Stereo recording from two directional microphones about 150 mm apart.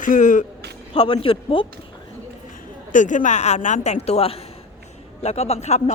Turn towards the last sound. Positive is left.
turn(degrees=45)  # may be behind; listen again after turning